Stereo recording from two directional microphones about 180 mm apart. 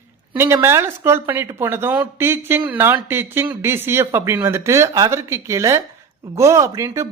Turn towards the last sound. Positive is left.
turn(degrees=-15)  # may be behind; listen again after turning